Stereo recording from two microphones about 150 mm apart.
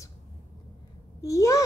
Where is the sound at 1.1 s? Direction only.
20° left (ahead or behind).